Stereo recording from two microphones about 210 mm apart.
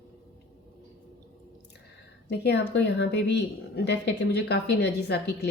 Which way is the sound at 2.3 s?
55° left (ahead or behind).